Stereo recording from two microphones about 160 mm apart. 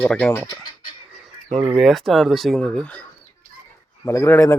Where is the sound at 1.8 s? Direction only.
Centre (ahead or behind).